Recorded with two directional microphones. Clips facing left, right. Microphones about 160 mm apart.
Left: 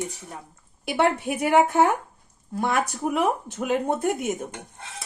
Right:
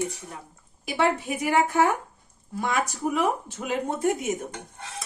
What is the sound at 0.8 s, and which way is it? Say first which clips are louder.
A woman's voice: left 2 dB; 65° left (ahead or behind).